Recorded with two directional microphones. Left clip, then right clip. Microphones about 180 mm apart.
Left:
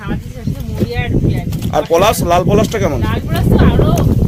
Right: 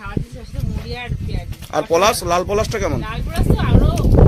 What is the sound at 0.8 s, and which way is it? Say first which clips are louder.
Speech: left 11 dB; centre (ahead or behind).